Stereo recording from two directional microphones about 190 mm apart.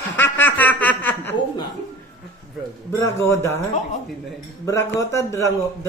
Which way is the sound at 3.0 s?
15° left (ahead or behind).